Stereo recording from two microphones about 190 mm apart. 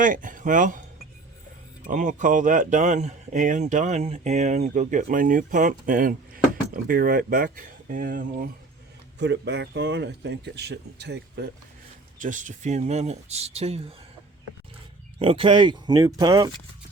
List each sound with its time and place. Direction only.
0.0 s speech: 45° right (ahead or behind)
1.9 s speech: 40° right (ahead or behind)
9.1 s speech: 65° right (ahead or behind)
12.2 s speech: 40° right (ahead or behind)
15.2 s speech: 30° right (ahead or behind)